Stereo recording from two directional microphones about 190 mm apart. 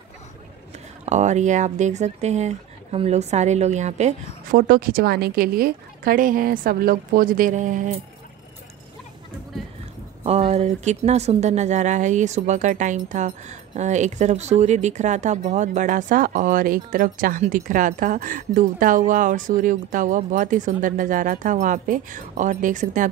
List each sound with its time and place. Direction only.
1.0 s speech: 40° right (ahead or behind)
10.2 s speech: 35° right (ahead or behind)